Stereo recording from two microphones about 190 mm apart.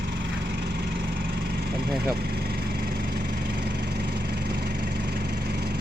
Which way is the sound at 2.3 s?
55° right (ahead or behind).